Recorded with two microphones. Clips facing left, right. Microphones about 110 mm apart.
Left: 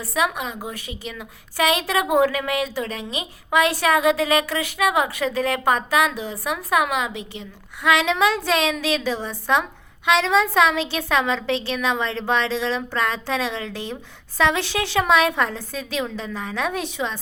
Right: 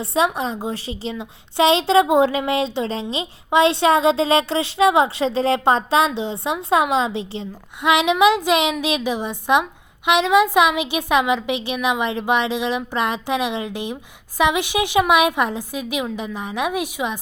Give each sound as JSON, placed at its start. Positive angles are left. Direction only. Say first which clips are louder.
{"t": 0.0, "sound": "a woman's voice", "louder": "right 4 dB", "side_deg": -30}